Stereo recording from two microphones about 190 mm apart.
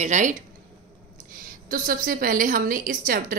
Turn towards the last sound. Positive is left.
turn(degrees=-45)  # may be behind; listen again after turning